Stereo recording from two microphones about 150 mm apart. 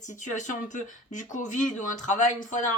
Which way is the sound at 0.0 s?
55° left (ahead or behind).